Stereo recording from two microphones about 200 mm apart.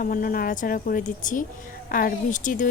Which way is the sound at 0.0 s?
45° left (ahead or behind).